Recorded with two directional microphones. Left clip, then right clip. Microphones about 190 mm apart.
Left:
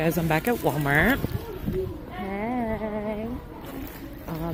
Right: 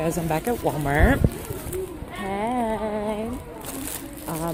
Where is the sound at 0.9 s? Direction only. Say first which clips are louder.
Even; 30° right (ahead or behind).